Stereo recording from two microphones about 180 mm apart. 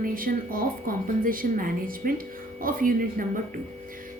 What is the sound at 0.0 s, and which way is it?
A woman's voice, 50° right (ahead or behind).